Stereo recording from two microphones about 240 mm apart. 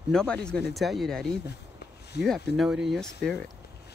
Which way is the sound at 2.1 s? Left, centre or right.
Left.